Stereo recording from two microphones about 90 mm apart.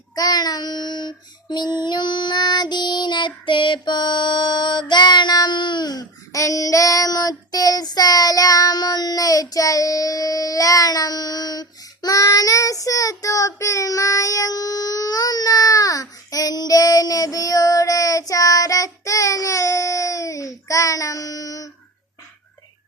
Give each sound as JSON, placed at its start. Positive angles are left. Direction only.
{"t": 0.2, "sound": "child singing", "side_deg": 45}